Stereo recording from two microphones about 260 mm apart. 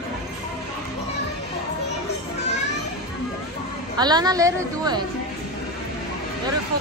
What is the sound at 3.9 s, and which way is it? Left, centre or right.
A woman's voice, centre.